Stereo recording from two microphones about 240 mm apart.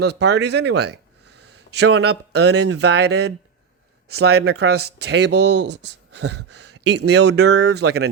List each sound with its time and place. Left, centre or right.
0.0 s speech: right
4.4 s speech: right